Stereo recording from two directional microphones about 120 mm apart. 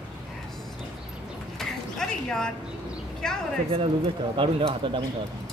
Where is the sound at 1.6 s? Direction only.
5° left (ahead or behind).